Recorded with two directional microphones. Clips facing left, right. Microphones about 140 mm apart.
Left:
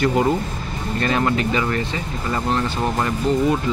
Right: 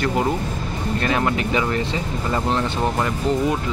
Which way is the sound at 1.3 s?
15° right (ahead or behind).